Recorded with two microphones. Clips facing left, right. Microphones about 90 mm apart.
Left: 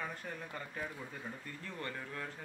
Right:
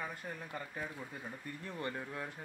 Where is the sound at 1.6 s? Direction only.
20° right (ahead or behind).